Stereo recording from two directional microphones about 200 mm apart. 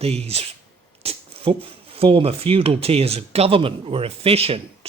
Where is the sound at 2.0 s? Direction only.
25° right (ahead or behind).